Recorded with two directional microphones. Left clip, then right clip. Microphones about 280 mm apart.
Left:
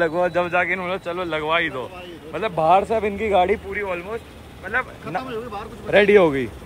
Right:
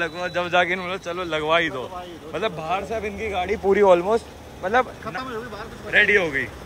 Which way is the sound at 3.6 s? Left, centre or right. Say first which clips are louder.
Right 11 dB; centre.